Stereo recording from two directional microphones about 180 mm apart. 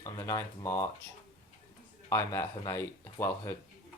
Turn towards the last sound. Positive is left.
turn(degrees=15)  # may be behind; listen again after turning